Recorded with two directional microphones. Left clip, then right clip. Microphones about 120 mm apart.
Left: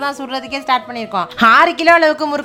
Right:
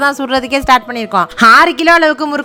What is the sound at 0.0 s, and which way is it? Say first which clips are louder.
A woman's voice: right 8 dB; 55° right (ahead or behind).